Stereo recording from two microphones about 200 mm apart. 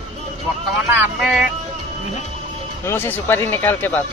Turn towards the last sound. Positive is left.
turn(degrees=10)  # may be behind; listen again after turning